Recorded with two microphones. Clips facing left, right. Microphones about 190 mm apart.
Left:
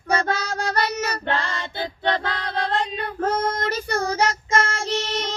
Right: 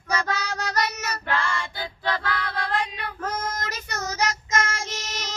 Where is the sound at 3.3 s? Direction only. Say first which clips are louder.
Left 7 dB; 30° left (ahead or behind).